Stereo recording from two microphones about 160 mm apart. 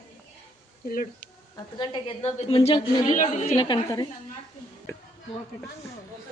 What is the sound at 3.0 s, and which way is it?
Speech, 50° left (ahead or behind).